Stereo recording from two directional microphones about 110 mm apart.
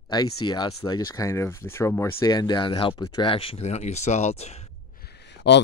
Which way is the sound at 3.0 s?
40° left (ahead or behind).